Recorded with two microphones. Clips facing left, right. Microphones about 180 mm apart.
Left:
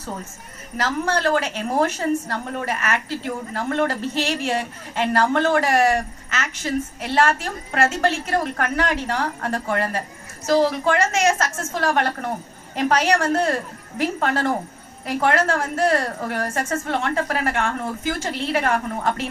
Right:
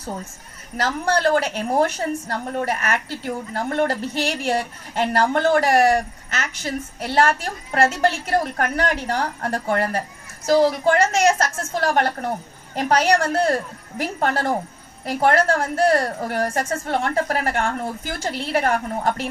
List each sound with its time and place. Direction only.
0.8 s a woman's voice: 35° right (ahead or behind)